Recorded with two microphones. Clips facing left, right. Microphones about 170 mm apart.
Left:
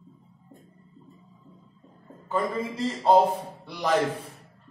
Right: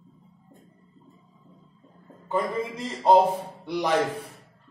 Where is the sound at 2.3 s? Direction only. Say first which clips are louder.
Right 1 dB; 15° right (ahead or behind).